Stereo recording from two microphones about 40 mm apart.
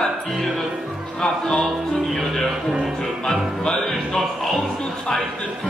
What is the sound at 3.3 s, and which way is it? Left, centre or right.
Music, centre.